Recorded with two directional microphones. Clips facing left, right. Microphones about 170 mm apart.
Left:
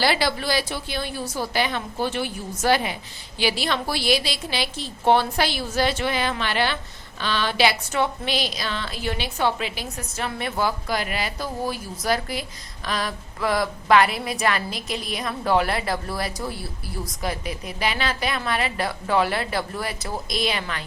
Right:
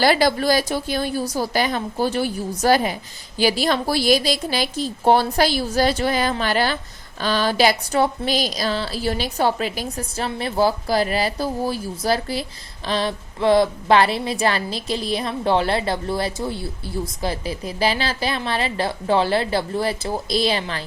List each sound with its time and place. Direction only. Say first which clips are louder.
0.0 s a woman's voice: right 5 dB; 45° right (ahead or behind)